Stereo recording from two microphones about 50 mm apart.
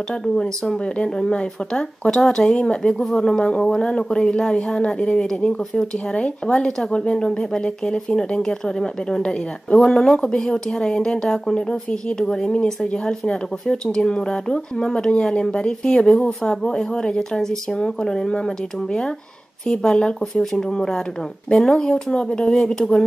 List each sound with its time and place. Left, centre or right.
0.4 s speech: centre